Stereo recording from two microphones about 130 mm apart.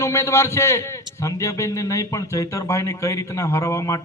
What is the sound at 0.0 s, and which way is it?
A man's voice, 25° left (ahead or behind).